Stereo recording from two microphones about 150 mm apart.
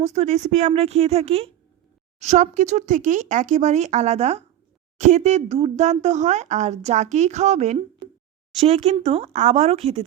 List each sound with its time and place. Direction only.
0.0 s speech: 50° right (ahead or behind)